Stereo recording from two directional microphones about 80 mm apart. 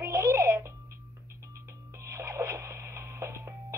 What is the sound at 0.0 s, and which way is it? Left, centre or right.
Music, right.